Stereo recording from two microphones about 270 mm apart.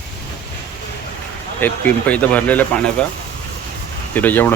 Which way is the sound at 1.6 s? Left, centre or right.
Centre.